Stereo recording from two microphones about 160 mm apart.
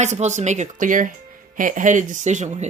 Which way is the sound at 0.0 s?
45° right (ahead or behind).